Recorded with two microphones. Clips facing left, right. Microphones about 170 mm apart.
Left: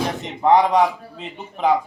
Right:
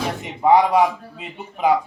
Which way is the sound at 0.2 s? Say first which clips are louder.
Right 1 dB; 10° right (ahead or behind).